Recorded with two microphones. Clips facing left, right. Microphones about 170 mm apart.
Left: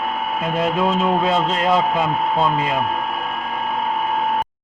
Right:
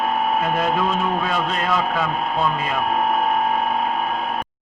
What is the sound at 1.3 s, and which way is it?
A man's voice, 25° left (ahead or behind).